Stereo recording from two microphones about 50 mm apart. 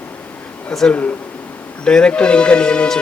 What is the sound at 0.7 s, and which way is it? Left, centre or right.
Speech, centre.